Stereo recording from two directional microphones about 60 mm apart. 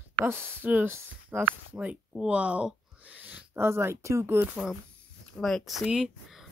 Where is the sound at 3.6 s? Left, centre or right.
Right.